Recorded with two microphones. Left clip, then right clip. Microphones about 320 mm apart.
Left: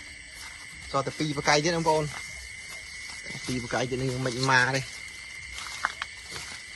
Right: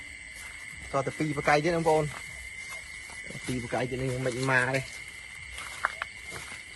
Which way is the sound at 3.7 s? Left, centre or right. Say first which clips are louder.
Left 2 dB; centre.